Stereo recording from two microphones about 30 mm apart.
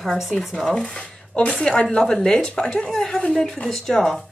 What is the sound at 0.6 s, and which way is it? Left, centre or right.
A woman's voice, left.